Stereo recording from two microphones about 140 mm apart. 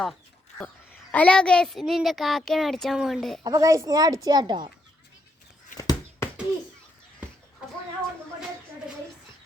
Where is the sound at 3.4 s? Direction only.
25° right (ahead or behind).